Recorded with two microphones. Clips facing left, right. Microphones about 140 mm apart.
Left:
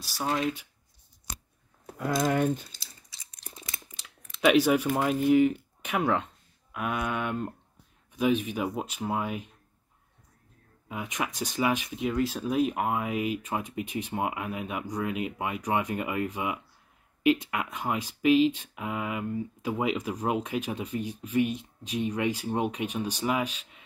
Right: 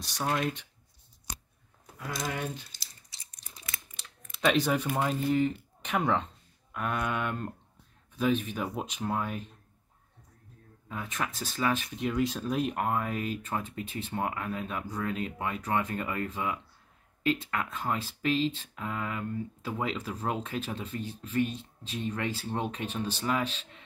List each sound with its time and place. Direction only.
0.0 s speech: 5° left (ahead or behind)
1.9 s speech: 50° left (ahead or behind)
3.5 s a sound: 25° left (ahead or behind)
4.0 s speech: 10° left (ahead or behind)
10.9 s speech: 15° left (ahead or behind)